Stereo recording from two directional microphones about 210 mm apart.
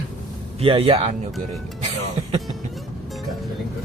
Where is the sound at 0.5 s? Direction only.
25° right (ahead or behind).